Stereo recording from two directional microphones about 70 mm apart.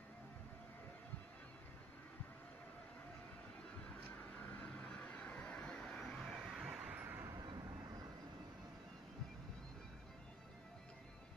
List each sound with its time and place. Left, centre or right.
4.6 s vehicle: centre
5.9 s vehicle: centre
6.3 s vehicle: centre
6.9 s a sound: right
7.3 s vehicle: right